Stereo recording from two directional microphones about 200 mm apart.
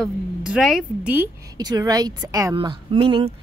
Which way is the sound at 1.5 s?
20° right (ahead or behind).